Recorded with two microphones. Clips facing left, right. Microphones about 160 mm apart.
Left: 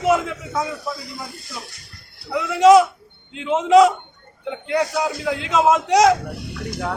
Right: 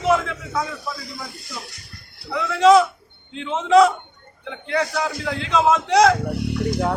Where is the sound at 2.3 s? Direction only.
15° left (ahead or behind).